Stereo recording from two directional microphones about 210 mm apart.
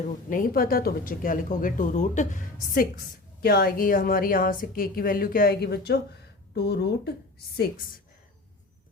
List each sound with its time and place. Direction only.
0.3 s a woman's voice: 40° left (ahead or behind)